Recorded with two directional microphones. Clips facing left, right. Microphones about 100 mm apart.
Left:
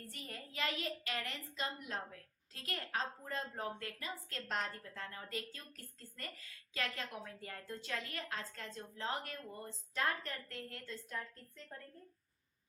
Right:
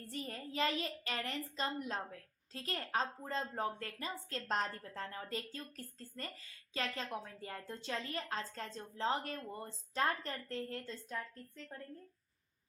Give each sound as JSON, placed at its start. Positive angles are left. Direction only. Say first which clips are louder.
{"t": 0.1, "sound": "a child's voice", "louder": "right 7 dB", "side_deg": -35}